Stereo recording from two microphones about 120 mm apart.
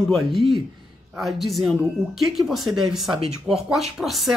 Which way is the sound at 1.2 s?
Centre (ahead or behind).